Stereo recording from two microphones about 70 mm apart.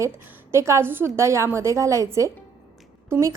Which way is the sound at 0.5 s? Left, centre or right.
Right.